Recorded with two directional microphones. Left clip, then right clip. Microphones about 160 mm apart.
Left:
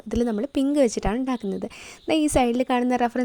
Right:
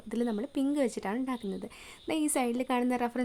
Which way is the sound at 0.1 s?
35° left (ahead or behind).